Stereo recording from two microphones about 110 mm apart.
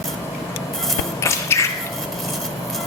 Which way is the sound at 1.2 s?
25° left (ahead or behind).